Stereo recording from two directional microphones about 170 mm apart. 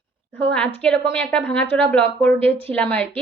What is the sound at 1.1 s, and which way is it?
Speech, 10° left (ahead or behind).